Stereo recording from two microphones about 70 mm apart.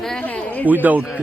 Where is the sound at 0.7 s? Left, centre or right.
Right.